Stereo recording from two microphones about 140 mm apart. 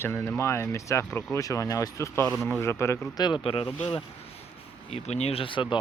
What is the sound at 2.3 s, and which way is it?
Speech, centre (ahead or behind).